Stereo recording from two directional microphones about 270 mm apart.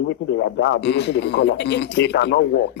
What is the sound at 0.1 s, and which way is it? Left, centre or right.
Speech, left.